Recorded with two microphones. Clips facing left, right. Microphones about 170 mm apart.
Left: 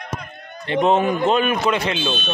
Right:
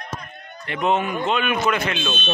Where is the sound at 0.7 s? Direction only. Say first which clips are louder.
Left 5 dB; 35° left (ahead or behind).